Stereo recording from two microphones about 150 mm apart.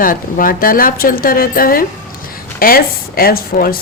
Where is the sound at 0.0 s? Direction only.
65° left (ahead or behind).